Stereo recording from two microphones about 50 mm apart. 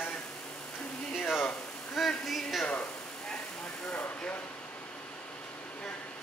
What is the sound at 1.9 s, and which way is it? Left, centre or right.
Speech, centre.